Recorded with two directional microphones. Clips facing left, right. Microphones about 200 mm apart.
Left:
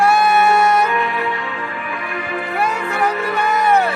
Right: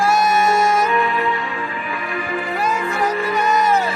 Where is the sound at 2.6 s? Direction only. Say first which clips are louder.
Left 2 dB; 65° left (ahead or behind).